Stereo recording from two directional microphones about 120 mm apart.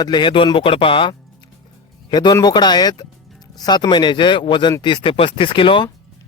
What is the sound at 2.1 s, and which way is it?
Speech, 35° left (ahead or behind).